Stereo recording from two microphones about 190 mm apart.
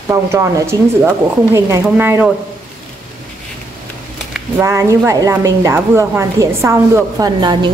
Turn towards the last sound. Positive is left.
turn(degrees=-25)  # may be behind; listen again after turning